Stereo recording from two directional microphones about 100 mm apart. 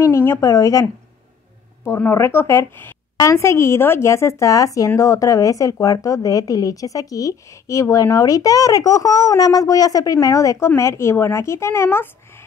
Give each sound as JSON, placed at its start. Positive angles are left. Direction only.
{"t": 0.0, "sound": "a woman's voice", "side_deg": 25}
{"t": 1.9, "sound": "a woman's voice", "side_deg": 25}